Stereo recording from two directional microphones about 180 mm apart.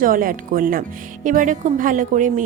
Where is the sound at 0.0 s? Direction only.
50° right (ahead or behind).